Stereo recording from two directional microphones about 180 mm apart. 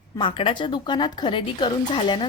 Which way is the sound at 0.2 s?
30° left (ahead or behind).